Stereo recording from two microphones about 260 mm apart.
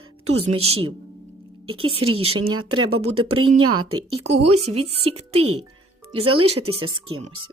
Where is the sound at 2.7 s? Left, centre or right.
Right.